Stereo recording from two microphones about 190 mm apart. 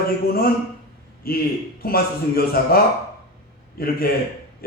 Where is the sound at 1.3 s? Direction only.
55° left (ahead or behind).